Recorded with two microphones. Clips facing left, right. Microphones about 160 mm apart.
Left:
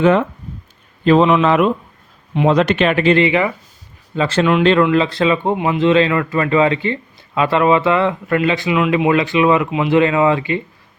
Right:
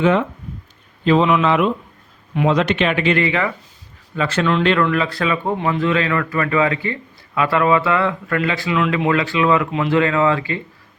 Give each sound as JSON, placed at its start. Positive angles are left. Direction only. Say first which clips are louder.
{"t": 0.0, "sound": "speech", "louder": "left 3 dB", "side_deg": 45}
{"t": 1.2, "sound": "speech", "louder": "left 3 dB", "side_deg": 30}
{"t": 1.5, "sound": "speech", "louder": "left 3 dB", "side_deg": 45}
{"t": 3.2, "sound": "speech", "louder": "left 4 dB", "side_deg": 20}
{"t": 4.1, "sound": "a man's voice", "louder": "left 4 dB", "side_deg": 30}